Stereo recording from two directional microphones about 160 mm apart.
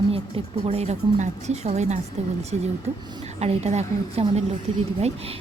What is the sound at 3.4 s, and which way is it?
Speech, 40° right (ahead or behind).